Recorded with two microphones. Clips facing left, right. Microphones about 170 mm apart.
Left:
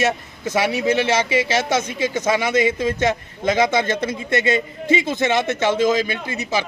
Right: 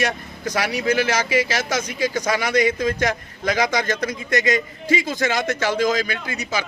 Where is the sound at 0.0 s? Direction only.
25° left (ahead or behind).